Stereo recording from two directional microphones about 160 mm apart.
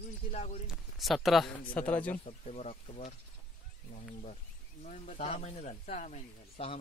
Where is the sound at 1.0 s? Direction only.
Centre (ahead or behind).